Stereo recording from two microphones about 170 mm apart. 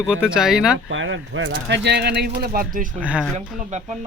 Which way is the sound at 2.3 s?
55° right (ahead or behind).